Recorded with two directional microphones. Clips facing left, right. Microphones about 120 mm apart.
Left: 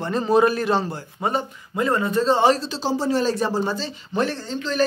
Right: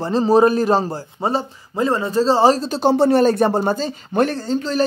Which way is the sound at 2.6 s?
60° right (ahead or behind).